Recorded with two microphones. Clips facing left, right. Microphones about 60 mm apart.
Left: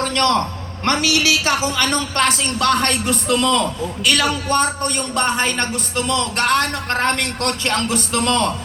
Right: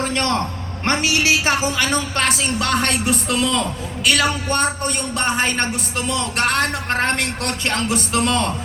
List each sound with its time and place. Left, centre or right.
0.0 s a man's voice: right
1.7 s speech: centre